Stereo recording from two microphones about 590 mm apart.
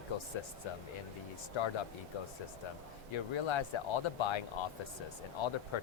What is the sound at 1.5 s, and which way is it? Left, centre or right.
Speech, left.